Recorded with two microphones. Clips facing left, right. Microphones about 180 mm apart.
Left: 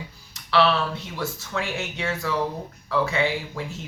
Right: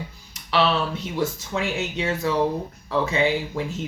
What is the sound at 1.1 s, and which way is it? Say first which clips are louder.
Speech: right 4 dB; 20° right (ahead or behind).